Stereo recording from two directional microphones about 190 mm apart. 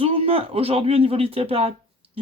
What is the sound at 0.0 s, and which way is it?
Speech, 30° right (ahead or behind).